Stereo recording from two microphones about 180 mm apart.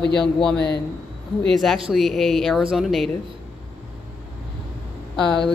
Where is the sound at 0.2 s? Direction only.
5° left (ahead or behind).